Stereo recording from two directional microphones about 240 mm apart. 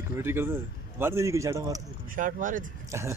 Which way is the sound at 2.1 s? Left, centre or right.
Right.